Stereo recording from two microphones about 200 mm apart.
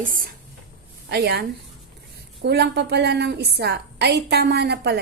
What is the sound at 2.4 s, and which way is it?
A woman's voice, 55° right (ahead or behind).